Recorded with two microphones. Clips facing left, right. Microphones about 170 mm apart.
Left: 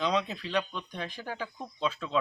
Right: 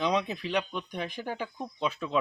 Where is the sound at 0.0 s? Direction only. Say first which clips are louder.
Right 1 dB; 15° right (ahead or behind).